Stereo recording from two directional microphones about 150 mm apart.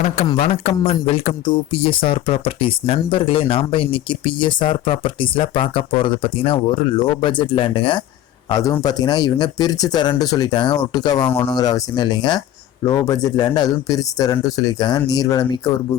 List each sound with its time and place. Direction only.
0.3 s a man's voice: 45° left (ahead or behind)
8.4 s speech: 25° left (ahead or behind)